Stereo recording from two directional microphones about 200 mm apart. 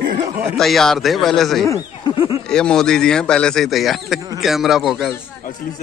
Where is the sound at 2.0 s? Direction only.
25° left (ahead or behind).